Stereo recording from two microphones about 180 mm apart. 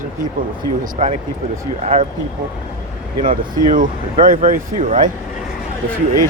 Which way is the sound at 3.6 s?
45° right (ahead or behind).